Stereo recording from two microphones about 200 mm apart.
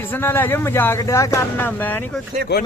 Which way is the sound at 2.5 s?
60° left (ahead or behind).